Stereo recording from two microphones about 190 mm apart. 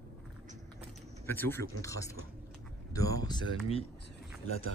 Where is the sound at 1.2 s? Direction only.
10° left (ahead or behind).